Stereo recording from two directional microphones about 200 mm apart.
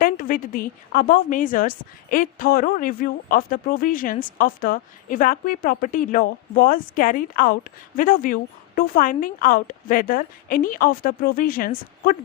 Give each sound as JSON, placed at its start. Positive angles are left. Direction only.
{"t": 0.0, "sound": "a woman's voice", "side_deg": 45}